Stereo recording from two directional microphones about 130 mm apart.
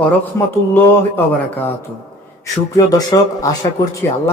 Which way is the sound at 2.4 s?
25° left (ahead or behind).